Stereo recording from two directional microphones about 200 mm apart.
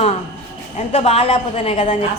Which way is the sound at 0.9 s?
30° left (ahead or behind).